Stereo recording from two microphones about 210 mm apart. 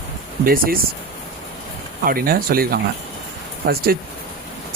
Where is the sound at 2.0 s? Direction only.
45° right (ahead or behind).